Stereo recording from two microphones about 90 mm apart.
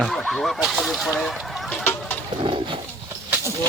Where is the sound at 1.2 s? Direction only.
Centre (ahead or behind).